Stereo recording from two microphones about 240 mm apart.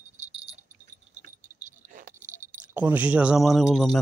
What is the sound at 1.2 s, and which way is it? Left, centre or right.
Keys jangling, right.